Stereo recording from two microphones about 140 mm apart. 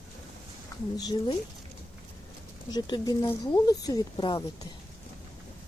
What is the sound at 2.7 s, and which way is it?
A woman's voice, 30° left (ahead or behind).